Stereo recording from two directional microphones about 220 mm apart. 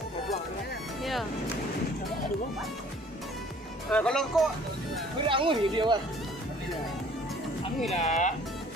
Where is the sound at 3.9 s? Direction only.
5° left (ahead or behind).